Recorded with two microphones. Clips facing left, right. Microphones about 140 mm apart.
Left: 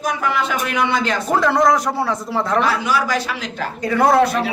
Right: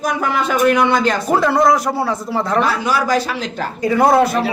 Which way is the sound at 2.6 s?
35° right (ahead or behind).